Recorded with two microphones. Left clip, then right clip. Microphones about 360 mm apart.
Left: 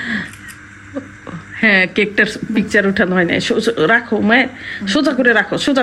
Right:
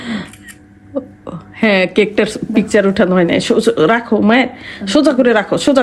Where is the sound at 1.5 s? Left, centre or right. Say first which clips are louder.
Even; centre.